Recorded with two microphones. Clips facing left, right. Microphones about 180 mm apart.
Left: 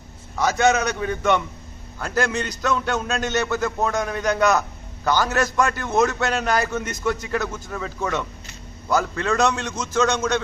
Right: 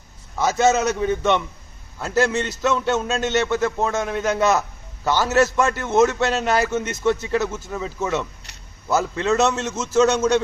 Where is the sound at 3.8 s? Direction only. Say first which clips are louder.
Right 1 dB; 25° right (ahead or behind).